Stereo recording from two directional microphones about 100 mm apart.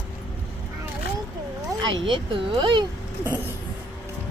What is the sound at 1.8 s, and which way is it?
Speech, 55° right (ahead or behind).